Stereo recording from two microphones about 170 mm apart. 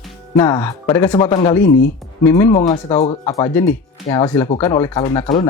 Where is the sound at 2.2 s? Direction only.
20° left (ahead or behind).